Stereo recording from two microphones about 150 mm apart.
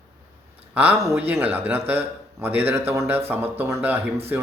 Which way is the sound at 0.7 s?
15° right (ahead or behind).